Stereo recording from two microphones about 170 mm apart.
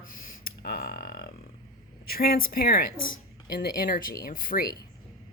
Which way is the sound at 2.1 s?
60° left (ahead or behind).